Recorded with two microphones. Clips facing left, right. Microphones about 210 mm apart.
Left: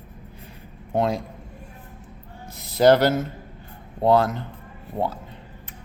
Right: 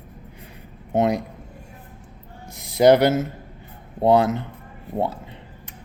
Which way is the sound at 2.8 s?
20° right (ahead or behind).